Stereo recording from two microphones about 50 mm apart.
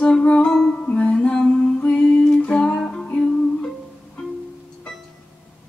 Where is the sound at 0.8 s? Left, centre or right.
Left.